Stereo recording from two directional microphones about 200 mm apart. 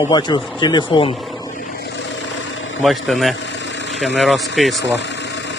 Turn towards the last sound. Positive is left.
turn(degrees=0)  # may be behind; listen again after turning